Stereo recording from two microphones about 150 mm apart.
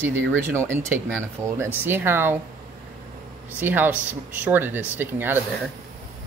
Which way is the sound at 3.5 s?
10° right (ahead or behind).